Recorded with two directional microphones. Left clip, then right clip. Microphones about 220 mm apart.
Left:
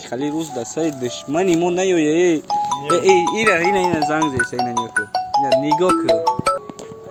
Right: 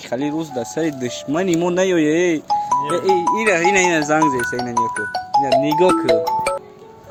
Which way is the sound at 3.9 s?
15° right (ahead or behind).